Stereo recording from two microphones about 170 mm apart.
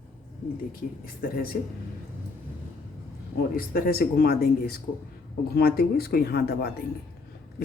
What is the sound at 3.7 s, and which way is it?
Speech, 60° left (ahead or behind).